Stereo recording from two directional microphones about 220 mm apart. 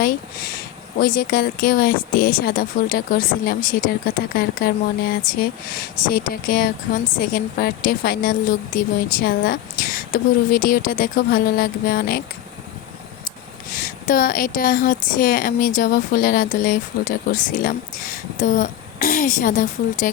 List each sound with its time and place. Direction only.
0.0 s a woman's voice: 40° left (ahead or behind)
13.7 s a woman's voice: 40° left (ahead or behind)